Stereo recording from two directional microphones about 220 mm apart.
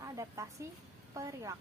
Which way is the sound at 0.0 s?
15° right (ahead or behind).